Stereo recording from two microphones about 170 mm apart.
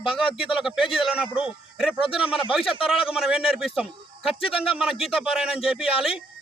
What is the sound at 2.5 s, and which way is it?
A man's voice, centre (ahead or behind).